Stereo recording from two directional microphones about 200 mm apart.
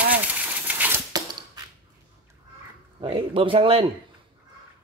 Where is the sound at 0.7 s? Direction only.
10° right (ahead or behind).